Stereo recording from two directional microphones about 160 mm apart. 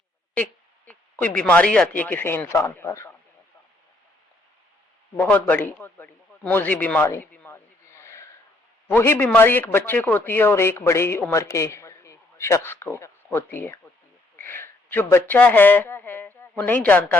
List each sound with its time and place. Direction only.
0.9 s speech: 10° left (ahead or behind)
5.1 s a man's voice: 10° left (ahead or behind)